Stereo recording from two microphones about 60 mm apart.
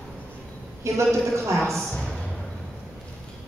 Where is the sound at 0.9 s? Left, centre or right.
Right.